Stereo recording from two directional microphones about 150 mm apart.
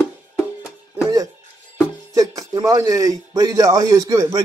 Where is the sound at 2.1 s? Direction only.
25° right (ahead or behind).